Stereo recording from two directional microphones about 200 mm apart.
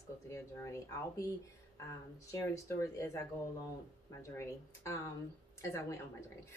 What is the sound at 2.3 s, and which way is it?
Speech, 15° left (ahead or behind).